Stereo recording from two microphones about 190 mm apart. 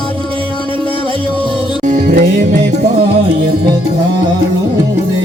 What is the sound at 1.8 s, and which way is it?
Music, 45° right (ahead or behind).